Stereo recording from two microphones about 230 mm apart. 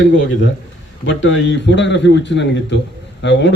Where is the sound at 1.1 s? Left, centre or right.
Left.